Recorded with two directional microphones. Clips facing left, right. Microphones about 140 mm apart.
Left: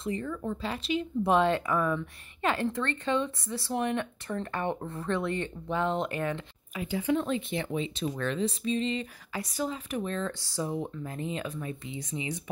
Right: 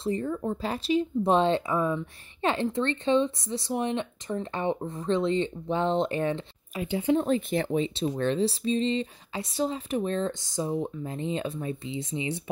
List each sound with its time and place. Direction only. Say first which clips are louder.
0.0 s speech: right 4 dB; 35° right (ahead or behind)
1.2 s speech: left 1 dB; 25° right (ahead or behind)
10.4 s speech: right 3 dB; 20° right (ahead or behind)